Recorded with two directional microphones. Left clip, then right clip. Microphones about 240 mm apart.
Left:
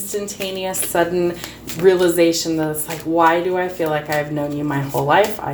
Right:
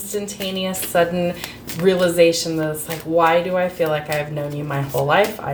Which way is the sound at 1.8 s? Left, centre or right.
Left.